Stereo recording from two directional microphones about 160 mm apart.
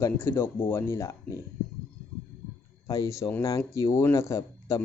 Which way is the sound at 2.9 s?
20° left (ahead or behind).